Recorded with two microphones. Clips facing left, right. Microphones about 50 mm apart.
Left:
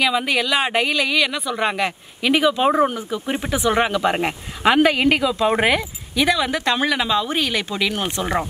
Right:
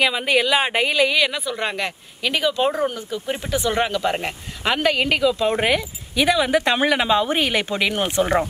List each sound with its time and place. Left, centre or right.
0.0 s speech: centre
6.1 s speech: centre